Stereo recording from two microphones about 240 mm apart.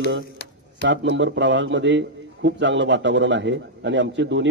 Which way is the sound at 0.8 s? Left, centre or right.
Right.